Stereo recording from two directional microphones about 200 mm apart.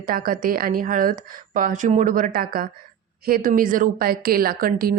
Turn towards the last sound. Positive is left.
turn(degrees=-45)  # may be behind; listen again after turning